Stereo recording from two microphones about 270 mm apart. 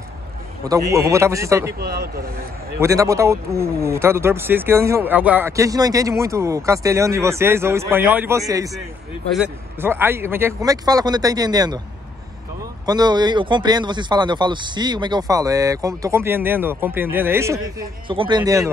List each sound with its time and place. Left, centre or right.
0.7 s speech: centre
1.8 s speech: right
2.8 s speech: centre
12.8 s speech: centre